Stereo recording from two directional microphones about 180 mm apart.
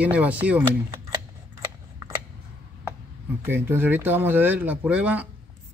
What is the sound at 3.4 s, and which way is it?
Speech, 10° right (ahead or behind).